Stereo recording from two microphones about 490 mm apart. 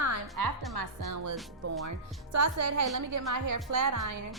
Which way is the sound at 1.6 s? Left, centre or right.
Right.